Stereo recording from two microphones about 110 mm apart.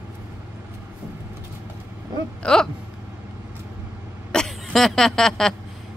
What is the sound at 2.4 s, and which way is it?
Speech, 5° left (ahead or behind).